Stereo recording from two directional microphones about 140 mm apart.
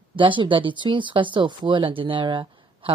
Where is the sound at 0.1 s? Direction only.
35° right (ahead or behind).